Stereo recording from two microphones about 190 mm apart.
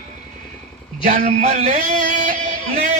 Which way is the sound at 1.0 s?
40° right (ahead or behind).